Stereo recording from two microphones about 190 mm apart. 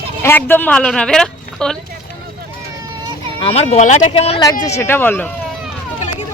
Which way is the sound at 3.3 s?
30° left (ahead or behind).